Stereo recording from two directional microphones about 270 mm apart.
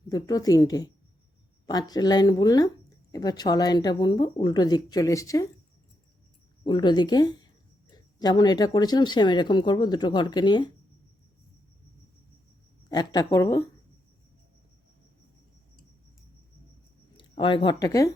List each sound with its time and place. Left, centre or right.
0.1 s speech: centre
6.7 s speech: centre
13.1 s speech: centre
17.2 s speech: centre